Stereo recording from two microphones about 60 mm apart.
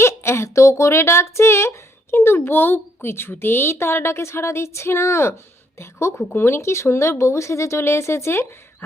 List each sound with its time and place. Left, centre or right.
0.0 s speech: left